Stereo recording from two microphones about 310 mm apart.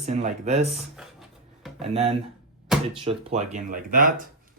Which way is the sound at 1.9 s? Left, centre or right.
Centre.